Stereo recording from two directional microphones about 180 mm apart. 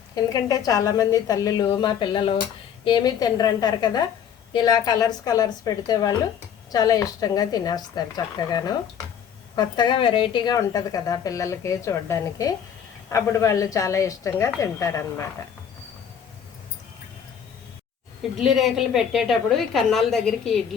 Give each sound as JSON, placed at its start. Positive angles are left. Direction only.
{"t": 0.2, "sound": "a woman's voice", "side_deg": 20}
{"t": 18.3, "sound": "a woman's voice", "side_deg": 0}